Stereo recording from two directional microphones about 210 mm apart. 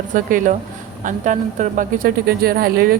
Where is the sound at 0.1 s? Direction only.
40° right (ahead or behind).